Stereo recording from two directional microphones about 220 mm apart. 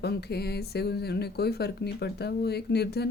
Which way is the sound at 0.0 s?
45° left (ahead or behind).